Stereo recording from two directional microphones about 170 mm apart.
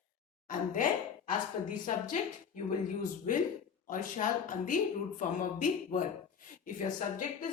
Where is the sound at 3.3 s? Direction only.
45° left (ahead or behind).